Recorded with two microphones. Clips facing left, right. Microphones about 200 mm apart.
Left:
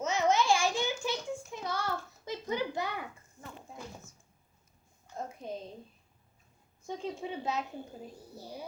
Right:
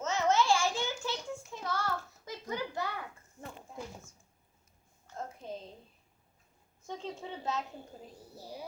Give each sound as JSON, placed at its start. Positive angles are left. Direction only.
{"t": 0.0, "sound": "child singing", "side_deg": 15}
{"t": 5.1, "sound": "a sound", "side_deg": 15}
{"t": 6.8, "sound": "a woman's voice", "side_deg": 10}
{"t": 8.4, "sound": "speech", "side_deg": 0}